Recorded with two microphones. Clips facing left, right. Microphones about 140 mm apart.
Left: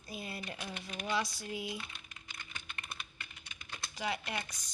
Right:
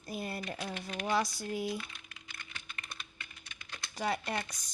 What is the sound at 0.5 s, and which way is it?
Speech, 30° right (ahead or behind).